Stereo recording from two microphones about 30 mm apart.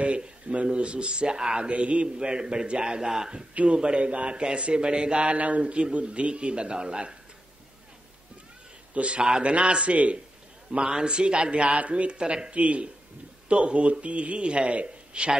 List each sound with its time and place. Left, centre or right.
0.7 s a man's voice: right
1.7 s speech: right
2.1 s speech: right
3.6 s a man's voice: right
8.9 s a man's voice: right
9.9 s speech: right
10.8 s a man's voice: right